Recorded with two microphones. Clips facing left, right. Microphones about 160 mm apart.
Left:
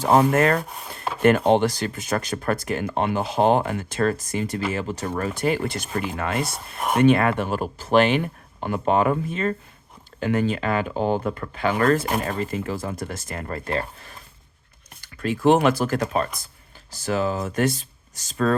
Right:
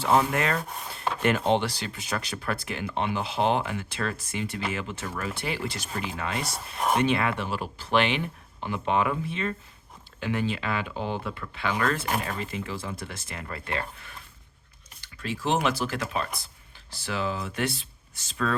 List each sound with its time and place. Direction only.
0.0 s speech: 40° left (ahead or behind)
15.0 s speech: 50° left (ahead or behind)